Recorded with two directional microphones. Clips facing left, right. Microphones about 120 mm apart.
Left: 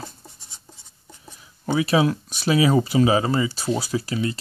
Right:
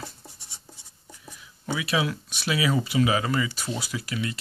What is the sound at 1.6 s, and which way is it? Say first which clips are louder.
Speech: left 7 dB; 40° left (ahead or behind).